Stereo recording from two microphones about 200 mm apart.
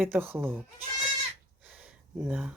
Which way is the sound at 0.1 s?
10° right (ahead or behind).